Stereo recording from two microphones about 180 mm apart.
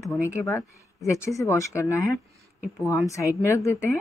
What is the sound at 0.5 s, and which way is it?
Speech, 15° left (ahead or behind).